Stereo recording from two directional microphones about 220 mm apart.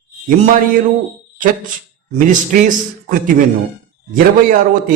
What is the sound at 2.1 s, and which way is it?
A man's voice, 35° right (ahead or behind).